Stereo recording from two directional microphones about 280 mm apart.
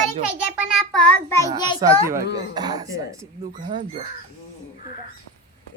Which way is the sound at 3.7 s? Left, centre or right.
Right.